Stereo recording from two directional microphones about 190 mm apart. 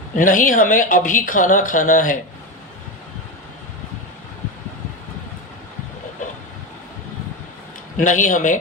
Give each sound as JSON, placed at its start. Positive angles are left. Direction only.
{"t": 0.2, "sound": "speech", "side_deg": 45}
{"t": 7.9, "sound": "a man's voice", "side_deg": 40}